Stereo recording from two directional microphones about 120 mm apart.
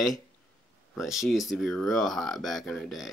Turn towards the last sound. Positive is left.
turn(degrees=0)  # may be behind; listen again after turning